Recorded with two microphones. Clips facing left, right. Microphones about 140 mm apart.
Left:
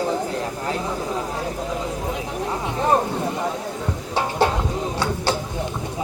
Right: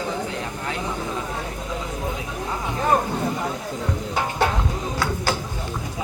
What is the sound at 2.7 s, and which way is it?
Speech, 30° left (ahead or behind).